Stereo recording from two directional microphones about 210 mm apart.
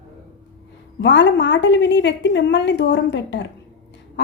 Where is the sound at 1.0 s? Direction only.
60° left (ahead or behind).